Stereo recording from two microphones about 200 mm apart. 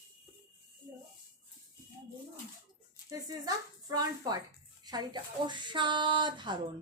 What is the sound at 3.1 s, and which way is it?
A woman's voice, 20° right (ahead or behind).